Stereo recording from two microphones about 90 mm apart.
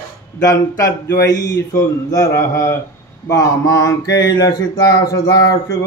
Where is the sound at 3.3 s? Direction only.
40° left (ahead or behind).